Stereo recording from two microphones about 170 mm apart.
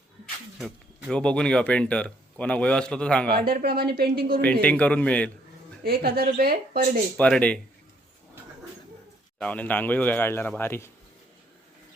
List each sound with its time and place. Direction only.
0.6 s speech: 5° left (ahead or behind)
3.3 s speech: 60° right (ahead or behind)
4.6 s speech: 10° left (ahead or behind)
5.8 s speech: 65° right (ahead or behind)
7.2 s speech: 5° left (ahead or behind)
9.4 s speech: 10° left (ahead or behind)